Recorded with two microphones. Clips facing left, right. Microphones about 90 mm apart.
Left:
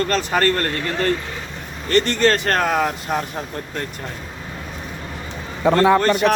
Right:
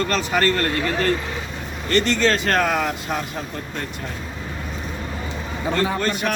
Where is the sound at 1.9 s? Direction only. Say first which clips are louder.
Left 2 dB; 40° left (ahead or behind).